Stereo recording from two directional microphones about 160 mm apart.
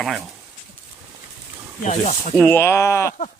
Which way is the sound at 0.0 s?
Centre (ahead or behind).